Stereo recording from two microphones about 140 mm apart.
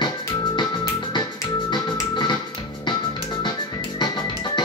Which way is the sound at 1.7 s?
35° left (ahead or behind).